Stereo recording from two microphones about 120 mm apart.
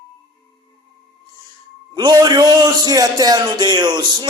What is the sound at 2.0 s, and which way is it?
A man's voice, 35° right (ahead or behind).